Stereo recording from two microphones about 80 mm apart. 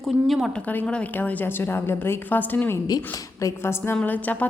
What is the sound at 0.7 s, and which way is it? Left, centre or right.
A woman's voice, centre.